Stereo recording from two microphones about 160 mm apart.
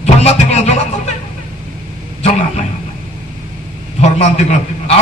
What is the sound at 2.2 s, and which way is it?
Speech, 45° left (ahead or behind).